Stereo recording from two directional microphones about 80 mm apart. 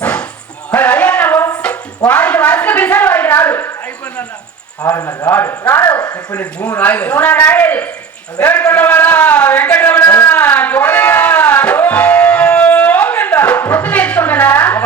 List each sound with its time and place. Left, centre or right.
0.0 s music: centre
0.7 s a sound: left
1.6 s music: centre
4.9 s speech: left
6.3 s a man's voice: centre
10.3 s music: left